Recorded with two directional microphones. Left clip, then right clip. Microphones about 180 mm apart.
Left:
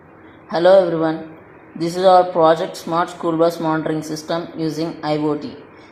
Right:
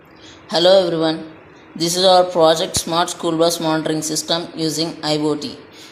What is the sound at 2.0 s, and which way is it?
Speech, centre (ahead or behind).